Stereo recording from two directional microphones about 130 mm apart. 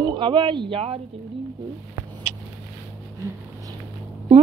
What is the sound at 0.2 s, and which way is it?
Speech, 40° right (ahead or behind).